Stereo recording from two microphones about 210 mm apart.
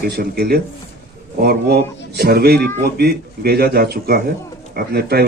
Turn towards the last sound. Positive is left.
turn(degrees=-50)  # may be behind; listen again after turning